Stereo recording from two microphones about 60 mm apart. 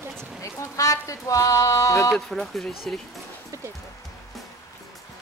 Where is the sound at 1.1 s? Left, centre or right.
Left.